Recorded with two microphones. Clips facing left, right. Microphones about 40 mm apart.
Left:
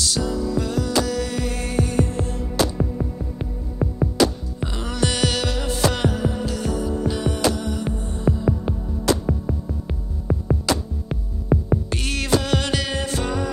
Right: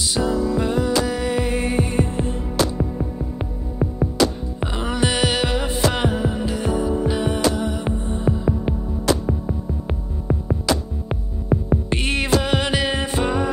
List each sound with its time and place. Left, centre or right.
0.0 s music: right
4.6 s music: right
11.9 s music: right